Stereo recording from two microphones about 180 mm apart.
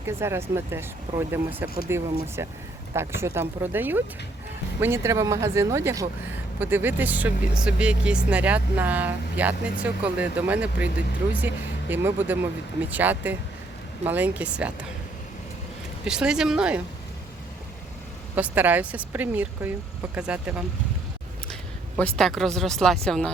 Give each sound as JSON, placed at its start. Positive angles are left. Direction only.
{"t": 0.0, "sound": "speech", "side_deg": -15}
{"t": 16.0, "sound": "speech", "side_deg": -5}
{"t": 18.3, "sound": "speech", "side_deg": -10}
{"t": 21.9, "sound": "speech", "side_deg": 5}